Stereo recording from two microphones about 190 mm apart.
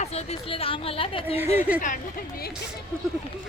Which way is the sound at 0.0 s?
35° left (ahead or behind).